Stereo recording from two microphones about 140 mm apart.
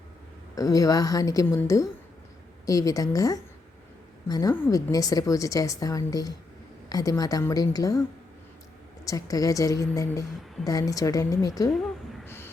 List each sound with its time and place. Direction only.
0.5 s a woman's voice: 25° left (ahead or behind)
4.5 s a woman's voice: 15° left (ahead or behind)
4.9 s a woman's voice: 25° left (ahead or behind)
9.0 s a woman's voice: 25° left (ahead or behind)
12.2 s a sound: 15° left (ahead or behind)